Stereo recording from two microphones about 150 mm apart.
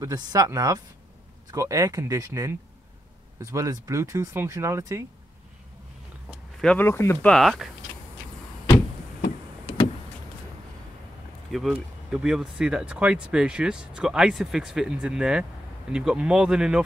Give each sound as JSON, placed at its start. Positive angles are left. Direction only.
{"t": 0.0, "sound": "speech", "side_deg": -25}
{"t": 3.5, "sound": "speech", "side_deg": -20}
{"t": 6.6, "sound": "speech", "side_deg": 10}
{"t": 7.2, "sound": "speech", "side_deg": 0}
{"t": 11.5, "sound": "speech", "side_deg": -5}